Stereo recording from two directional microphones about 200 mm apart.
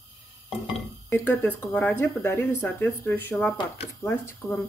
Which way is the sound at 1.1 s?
5° left (ahead or behind).